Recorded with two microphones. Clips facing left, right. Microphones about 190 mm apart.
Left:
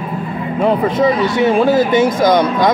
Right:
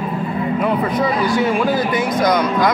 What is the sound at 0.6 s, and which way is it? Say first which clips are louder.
Speech: left 7 dB; 25° left (ahead or behind).